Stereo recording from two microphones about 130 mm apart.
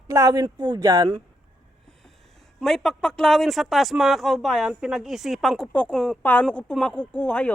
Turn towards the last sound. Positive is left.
turn(degrees=10)  # may be behind; listen again after turning